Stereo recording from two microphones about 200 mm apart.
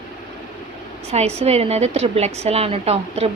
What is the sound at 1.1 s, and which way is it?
A woman's voice, 30° right (ahead or behind).